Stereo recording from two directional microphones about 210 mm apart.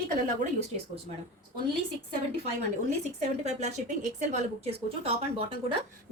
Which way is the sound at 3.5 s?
35° right (ahead or behind).